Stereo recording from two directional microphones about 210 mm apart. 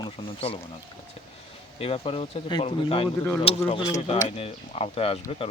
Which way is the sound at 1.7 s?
25° left (ahead or behind).